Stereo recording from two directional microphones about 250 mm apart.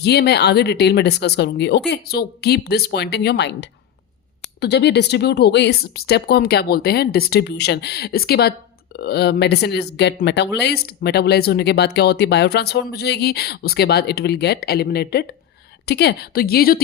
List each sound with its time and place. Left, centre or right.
0.0 s speech: left